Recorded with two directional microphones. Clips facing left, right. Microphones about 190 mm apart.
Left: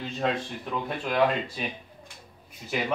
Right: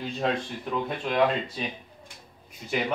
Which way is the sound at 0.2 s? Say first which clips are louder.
Even; centre (ahead or behind).